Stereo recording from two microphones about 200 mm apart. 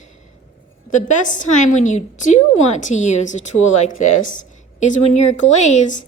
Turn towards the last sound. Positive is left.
turn(degrees=35)  # may be behind; listen again after turning